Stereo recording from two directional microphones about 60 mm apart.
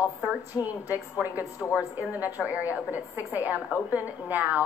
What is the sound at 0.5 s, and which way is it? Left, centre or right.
Speech, left.